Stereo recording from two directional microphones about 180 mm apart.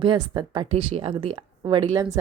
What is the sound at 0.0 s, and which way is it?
A woman's voice, 25° right (ahead or behind).